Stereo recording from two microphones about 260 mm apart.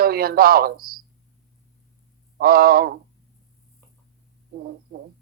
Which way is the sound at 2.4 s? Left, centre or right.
Right.